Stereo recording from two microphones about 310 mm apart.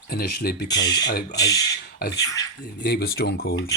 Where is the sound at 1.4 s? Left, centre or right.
Centre.